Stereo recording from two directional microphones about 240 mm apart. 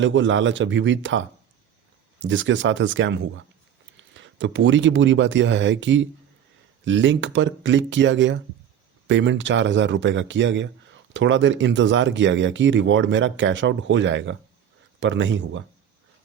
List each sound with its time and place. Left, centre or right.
0.0 s speech: right
2.2 s speech: right
4.2 s speech: right